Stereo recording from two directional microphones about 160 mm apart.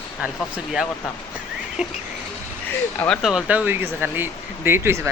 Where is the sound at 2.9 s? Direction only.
5° left (ahead or behind).